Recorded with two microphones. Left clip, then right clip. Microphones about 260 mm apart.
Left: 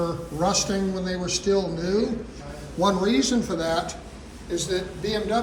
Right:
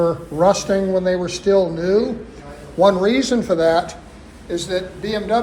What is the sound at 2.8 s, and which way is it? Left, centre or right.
Speech, centre.